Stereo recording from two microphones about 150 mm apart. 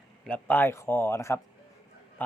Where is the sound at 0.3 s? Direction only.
10° left (ahead or behind).